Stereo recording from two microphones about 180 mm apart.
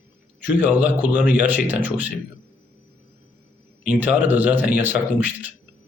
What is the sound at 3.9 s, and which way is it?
Speech, 10° right (ahead or behind).